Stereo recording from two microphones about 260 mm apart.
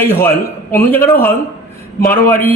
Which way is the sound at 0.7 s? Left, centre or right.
Centre.